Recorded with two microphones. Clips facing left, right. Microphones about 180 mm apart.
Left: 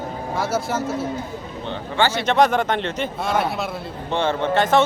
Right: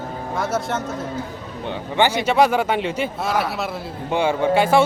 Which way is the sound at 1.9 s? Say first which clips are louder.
Right 1 dB; 15° right (ahead or behind).